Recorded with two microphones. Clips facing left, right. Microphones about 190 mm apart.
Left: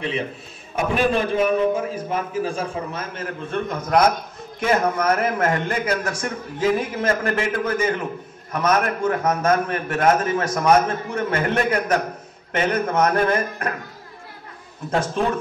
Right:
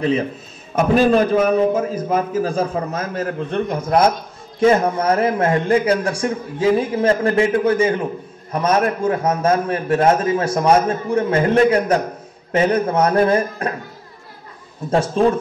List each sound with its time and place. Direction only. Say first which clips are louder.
0.7 s a man's voice: right 6 dB; 40° right (ahead or behind)
14.9 s a man's voice: right 5 dB; 30° right (ahead or behind)